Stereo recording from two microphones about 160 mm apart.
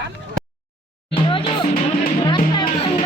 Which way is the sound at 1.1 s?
35° left (ahead or behind).